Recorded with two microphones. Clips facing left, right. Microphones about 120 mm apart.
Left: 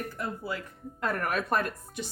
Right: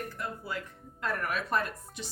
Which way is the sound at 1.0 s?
55° left (ahead or behind).